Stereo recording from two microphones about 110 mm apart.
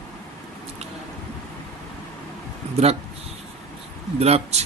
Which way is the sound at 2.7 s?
70° right (ahead or behind).